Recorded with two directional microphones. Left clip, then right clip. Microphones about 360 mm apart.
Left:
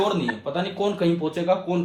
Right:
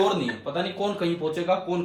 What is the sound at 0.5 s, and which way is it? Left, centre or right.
Speech, left.